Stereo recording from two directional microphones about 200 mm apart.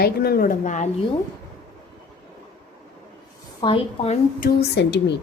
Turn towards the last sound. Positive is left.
turn(degrees=60)  # may be behind; listen again after turning